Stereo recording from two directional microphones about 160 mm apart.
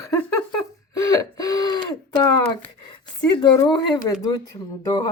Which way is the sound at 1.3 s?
25° left (ahead or behind).